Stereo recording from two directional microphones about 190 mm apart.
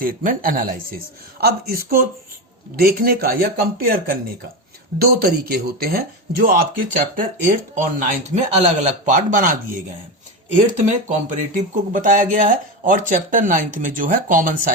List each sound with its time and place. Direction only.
0.0 s speech: 45° right (ahead or behind)
4.9 s speech: 55° right (ahead or behind)